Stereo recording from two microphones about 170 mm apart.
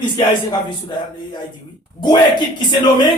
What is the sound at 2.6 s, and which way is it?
Speech, 25° left (ahead or behind).